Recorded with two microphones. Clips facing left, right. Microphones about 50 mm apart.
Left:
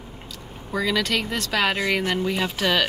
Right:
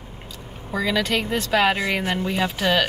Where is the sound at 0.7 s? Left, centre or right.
Centre.